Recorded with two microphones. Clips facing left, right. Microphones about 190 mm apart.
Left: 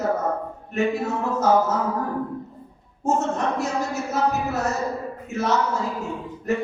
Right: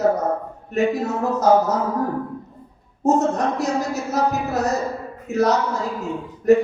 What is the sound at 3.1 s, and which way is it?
Speech, 40° right (ahead or behind).